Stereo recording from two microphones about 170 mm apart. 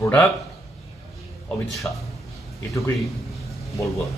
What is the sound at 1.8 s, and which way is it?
Speech, 10° left (ahead or behind).